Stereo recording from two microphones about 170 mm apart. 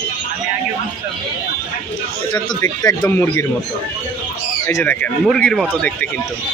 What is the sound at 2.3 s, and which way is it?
Speech, 20° left (ahead or behind).